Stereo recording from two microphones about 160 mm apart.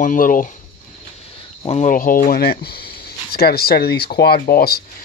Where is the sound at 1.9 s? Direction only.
60° left (ahead or behind).